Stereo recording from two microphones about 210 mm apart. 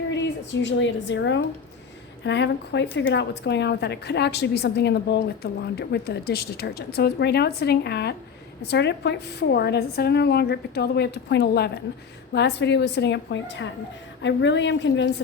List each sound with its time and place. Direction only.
0.1 s a woman's voice: 60° left (ahead or behind)